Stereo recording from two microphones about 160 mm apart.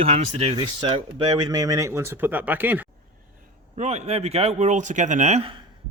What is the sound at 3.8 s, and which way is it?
Speech, 45° right (ahead or behind).